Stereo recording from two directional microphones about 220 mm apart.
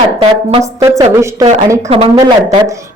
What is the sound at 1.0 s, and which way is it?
Speech, 15° right (ahead or behind).